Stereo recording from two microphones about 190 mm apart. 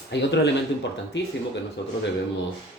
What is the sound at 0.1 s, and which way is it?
Speech, 65° left (ahead or behind).